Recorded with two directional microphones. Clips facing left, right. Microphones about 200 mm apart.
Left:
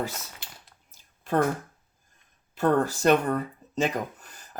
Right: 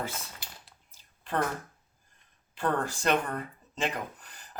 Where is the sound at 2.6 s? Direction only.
40° left (ahead or behind).